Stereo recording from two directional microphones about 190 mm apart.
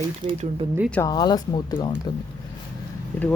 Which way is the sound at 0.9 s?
15° left (ahead or behind).